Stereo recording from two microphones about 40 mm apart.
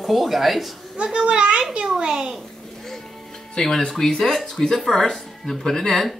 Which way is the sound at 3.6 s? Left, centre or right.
Centre.